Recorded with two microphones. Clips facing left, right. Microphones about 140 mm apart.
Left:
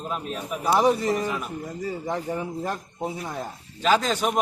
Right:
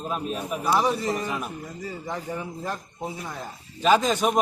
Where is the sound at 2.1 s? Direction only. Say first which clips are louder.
Left 3 dB; 25° left (ahead or behind).